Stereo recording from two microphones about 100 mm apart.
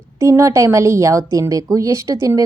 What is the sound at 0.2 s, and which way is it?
A woman's voice, 30° right (ahead or behind).